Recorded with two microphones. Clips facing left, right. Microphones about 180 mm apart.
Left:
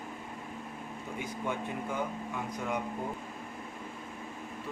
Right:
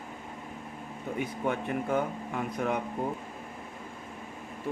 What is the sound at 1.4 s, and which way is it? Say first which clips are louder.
Speech: right 5 dB; 60° right (ahead or behind).